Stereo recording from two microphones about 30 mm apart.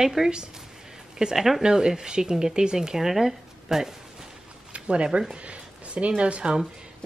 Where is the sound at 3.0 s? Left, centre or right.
Centre.